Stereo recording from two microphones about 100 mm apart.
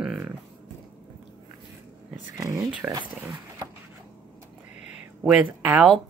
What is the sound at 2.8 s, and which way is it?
Speech, 20° right (ahead or behind).